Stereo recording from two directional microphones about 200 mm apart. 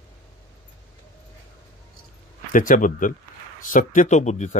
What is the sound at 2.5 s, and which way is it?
Speech, 40° left (ahead or behind).